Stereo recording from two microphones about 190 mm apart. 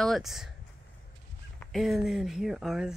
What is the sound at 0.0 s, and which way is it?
Speech, centre (ahead or behind).